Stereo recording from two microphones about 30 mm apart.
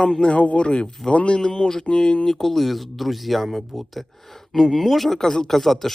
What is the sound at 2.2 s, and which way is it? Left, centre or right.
Speech, centre.